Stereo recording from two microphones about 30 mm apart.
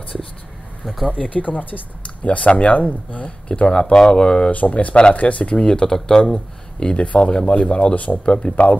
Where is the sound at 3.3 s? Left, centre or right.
Left.